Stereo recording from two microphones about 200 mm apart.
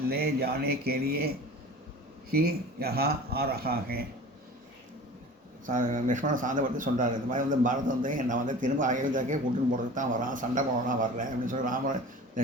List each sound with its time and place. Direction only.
0.1 s speech: 50° right (ahead or behind)
2.3 s speech: 50° right (ahead or behind)
5.6 s a man's voice: 40° right (ahead or behind)